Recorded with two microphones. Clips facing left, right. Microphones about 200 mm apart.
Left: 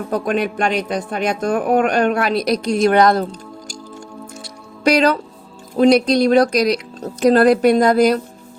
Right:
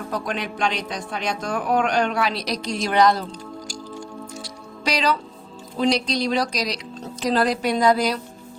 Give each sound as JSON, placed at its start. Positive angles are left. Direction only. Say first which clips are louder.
{"t": 0.1, "sound": "speech", "louder": "left 9 dB", "side_deg": 55}
{"t": 4.8, "sound": "speech", "louder": "left 8 dB", "side_deg": 55}